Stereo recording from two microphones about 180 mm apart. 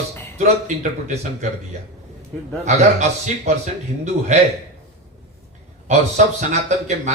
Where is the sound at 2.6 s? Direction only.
40° right (ahead or behind).